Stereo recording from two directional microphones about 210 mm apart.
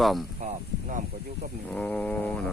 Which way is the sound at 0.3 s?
35° right (ahead or behind).